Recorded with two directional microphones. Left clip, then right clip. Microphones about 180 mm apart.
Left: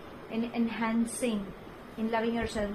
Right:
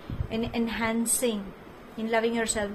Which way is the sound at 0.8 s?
50° right (ahead or behind).